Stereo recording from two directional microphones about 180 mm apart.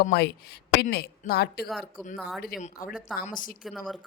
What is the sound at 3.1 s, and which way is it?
Speech, centre (ahead or behind).